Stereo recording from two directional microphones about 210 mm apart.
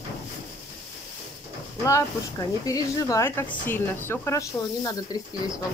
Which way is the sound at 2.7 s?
15° left (ahead or behind).